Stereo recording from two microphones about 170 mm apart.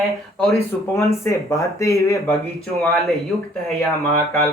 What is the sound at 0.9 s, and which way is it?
Speech, 15° left (ahead or behind).